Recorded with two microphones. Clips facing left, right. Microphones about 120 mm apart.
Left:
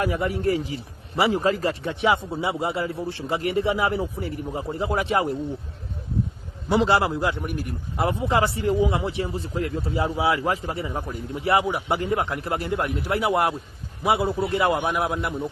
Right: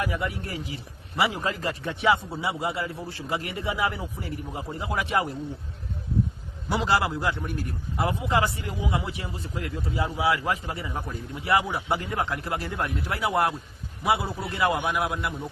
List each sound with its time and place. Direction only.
0.0 s a man's voice: 35° left (ahead or behind)
6.7 s a man's voice: 25° left (ahead or behind)
7.9 s a man's voice: 25° left (ahead or behind)